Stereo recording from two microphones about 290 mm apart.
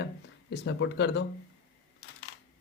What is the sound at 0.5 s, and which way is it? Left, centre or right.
Speech, left.